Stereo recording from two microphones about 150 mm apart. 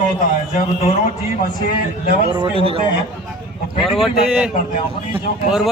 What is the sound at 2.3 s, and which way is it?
Speech, 35° right (ahead or behind).